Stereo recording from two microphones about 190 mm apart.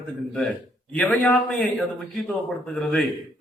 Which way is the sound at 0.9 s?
5° left (ahead or behind).